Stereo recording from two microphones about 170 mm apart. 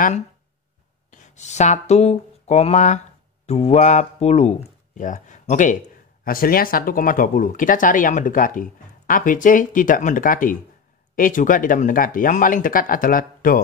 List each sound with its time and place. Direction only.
1.1 s speech: 45° left (ahead or behind)
6.2 s speech: 60° left (ahead or behind)